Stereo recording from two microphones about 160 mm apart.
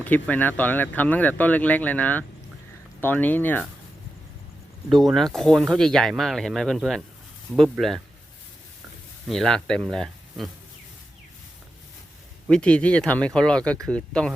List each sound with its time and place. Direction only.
0.0 s speech: 10° left (ahead or behind)
4.9 s speech: centre (ahead or behind)
9.2 s speech: centre (ahead or behind)
12.5 s speech: 5° left (ahead or behind)